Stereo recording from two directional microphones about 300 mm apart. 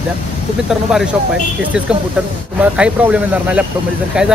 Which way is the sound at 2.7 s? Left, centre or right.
Centre.